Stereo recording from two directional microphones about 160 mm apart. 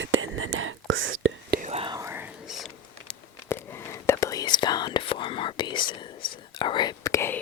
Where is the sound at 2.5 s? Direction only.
Centre (ahead or behind).